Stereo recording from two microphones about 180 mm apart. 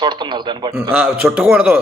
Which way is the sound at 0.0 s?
25° right (ahead or behind).